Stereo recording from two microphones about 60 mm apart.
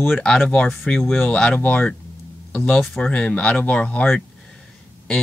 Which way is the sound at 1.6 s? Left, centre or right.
Left.